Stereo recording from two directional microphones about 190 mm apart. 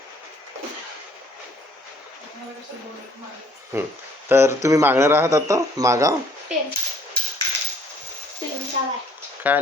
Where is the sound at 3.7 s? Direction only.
15° right (ahead or behind).